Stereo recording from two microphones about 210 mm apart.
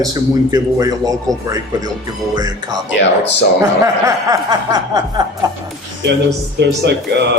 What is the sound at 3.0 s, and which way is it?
Speech, 55° left (ahead or behind).